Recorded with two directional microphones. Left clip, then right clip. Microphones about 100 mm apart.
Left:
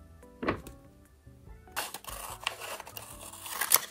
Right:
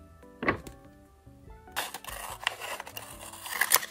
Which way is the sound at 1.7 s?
15° right (ahead or behind).